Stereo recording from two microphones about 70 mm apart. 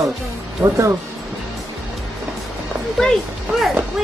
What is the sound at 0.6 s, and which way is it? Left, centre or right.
Speech, right.